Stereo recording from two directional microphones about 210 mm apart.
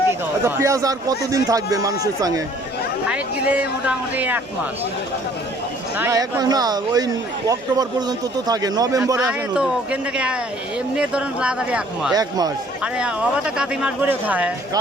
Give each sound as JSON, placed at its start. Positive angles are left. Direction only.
{"t": 0.1, "sound": "speech", "side_deg": -15}
{"t": 3.1, "sound": "speech", "side_deg": -5}
{"t": 6.0, "sound": "speech", "side_deg": -15}
{"t": 12.1, "sound": "speech", "side_deg": -20}
{"t": 12.8, "sound": "speech", "side_deg": -5}